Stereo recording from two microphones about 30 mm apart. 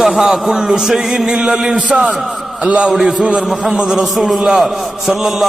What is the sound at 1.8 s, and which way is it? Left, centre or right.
Speech, right.